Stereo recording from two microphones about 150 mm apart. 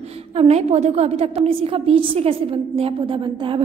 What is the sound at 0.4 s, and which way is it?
A woman's voice, 45° right (ahead or behind).